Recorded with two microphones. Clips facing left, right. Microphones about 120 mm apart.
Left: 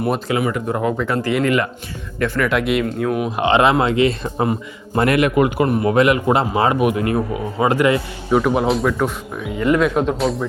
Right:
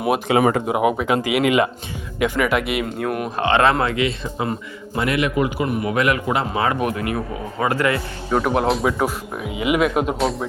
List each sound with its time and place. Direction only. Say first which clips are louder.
0.7 s speech: right 1 dB; 15° right (ahead or behind)
3.3 s speech: left 2 dB; 15° left (ahead or behind)
4.0 s speech: left 5 dB; 40° left (ahead or behind)
4.9 s a man's voice: left 5 dB; 50° left (ahead or behind)
5.6 s speech: left 5 dB; 35° left (ahead or behind)
7.6 s speech: left 4 dB; 20° left (ahead or behind)
8.4 s speech: left 1 dB; centre (ahead or behind)